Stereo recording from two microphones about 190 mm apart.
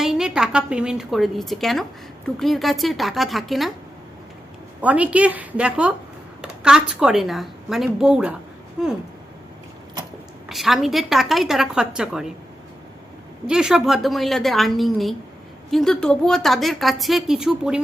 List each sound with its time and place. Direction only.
0.0 s a woman's voice: centre (ahead or behind)
4.8 s a woman's voice: 5° right (ahead or behind)
10.5 s a woman's voice: centre (ahead or behind)
13.5 s a woman's voice: 5° right (ahead or behind)